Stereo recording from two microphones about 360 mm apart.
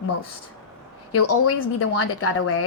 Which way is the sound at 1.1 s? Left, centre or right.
Left.